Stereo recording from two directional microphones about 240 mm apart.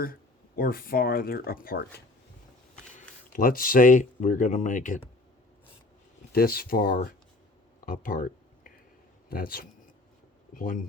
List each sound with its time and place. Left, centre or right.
0.0 s speech: left
2.9 s speech: left
6.3 s speech: left
7.9 s a sound: left
9.3 s speech: left